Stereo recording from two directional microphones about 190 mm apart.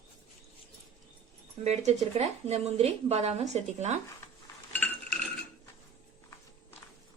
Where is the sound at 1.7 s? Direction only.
35° right (ahead or behind).